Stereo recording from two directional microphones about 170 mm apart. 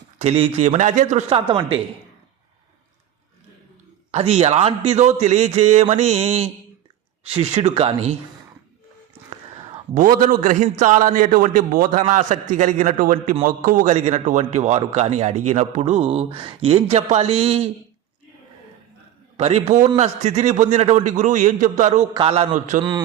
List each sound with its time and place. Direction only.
0.2 s a man's voice: 35° right (ahead or behind)
1.4 s a man's voice: 30° right (ahead or behind)
4.1 s a man's voice: 40° right (ahead or behind)
9.6 s a sound: 35° right (ahead or behind)
10.0 s a man's voice: 55° right (ahead or behind); by 17.7 s 35° right (ahead or behind)
19.4 s a man's voice: 40° right (ahead or behind)
22.1 s a man's voice: 30° right (ahead or behind)
22.5 s a man's voice: 50° right (ahead or behind)
22.8 s a man's voice: 25° right (ahead or behind)